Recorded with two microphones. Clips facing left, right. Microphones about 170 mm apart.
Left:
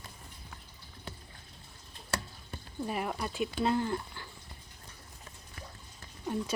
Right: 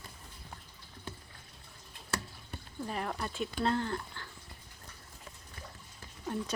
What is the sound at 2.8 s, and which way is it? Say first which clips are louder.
Speech: left 2 dB; 10° left (ahead or behind).